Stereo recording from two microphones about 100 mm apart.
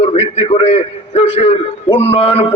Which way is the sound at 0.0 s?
90° left.